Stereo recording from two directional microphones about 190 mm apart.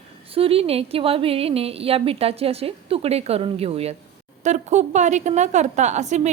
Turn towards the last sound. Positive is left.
turn(degrees=-40)  # may be behind; listen again after turning